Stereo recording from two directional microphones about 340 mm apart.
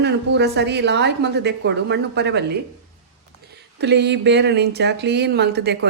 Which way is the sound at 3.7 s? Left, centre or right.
Right.